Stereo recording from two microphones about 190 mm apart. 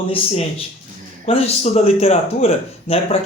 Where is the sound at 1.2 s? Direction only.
35° left (ahead or behind).